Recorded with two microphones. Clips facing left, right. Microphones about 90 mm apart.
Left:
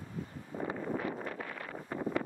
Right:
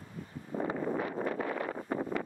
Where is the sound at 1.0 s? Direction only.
30° right (ahead or behind).